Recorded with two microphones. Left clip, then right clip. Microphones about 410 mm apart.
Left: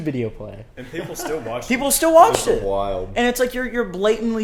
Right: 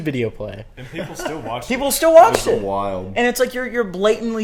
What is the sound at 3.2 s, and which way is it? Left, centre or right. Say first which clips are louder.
A man's voice: right 2 dB; centre.